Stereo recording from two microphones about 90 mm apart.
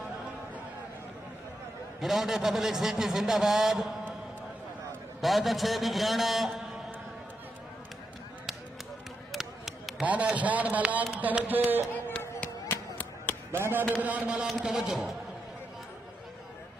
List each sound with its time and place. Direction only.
2.0 s a man's voice: 5° right (ahead or behind)
5.2 s a man's voice: centre (ahead or behind)
9.3 s a sound: centre (ahead or behind)
10.0 s a man's voice: 15° right (ahead or behind)
12.9 s a sound: 20° left (ahead or behind)
13.5 s a man's voice: 25° right (ahead or behind)
14.0 s a man's voice: 15° right (ahead or behind)